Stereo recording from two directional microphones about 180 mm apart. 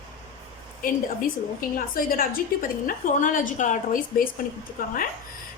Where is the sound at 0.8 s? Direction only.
50° left (ahead or behind).